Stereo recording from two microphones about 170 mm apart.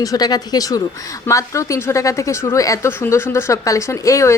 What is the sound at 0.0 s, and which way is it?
A woman's voice, 20° left (ahead or behind).